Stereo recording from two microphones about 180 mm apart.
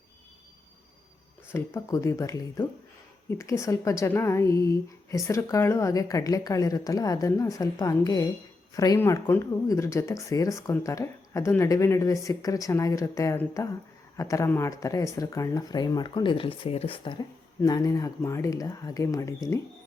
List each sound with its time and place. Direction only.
1.5 s speech: 15° left (ahead or behind)